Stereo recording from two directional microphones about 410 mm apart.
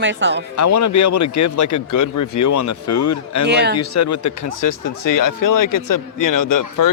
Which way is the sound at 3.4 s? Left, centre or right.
Right.